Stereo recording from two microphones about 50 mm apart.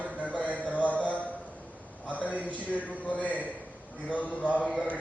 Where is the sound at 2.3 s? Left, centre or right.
Right.